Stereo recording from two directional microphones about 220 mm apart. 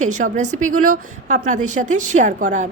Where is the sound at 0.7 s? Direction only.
85° right.